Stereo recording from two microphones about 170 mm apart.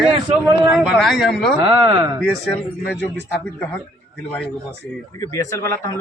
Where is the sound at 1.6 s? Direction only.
20° right (ahead or behind).